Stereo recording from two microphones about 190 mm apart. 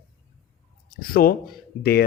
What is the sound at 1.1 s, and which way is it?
Speech, 50° left (ahead or behind).